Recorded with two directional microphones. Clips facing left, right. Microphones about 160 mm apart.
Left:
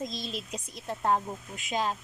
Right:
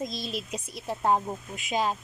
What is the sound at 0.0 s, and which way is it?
Speech, 10° right (ahead or behind).